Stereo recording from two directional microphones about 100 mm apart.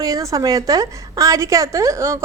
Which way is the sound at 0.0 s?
35° right (ahead or behind).